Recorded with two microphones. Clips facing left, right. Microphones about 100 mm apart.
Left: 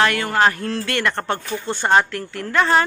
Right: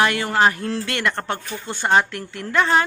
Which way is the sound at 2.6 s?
Centre (ahead or behind).